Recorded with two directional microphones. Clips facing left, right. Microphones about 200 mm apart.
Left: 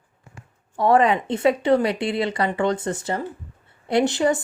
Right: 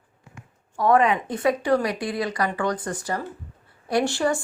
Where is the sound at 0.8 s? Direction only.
30° left (ahead or behind).